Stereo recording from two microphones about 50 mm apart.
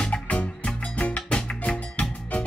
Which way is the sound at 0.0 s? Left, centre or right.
Left.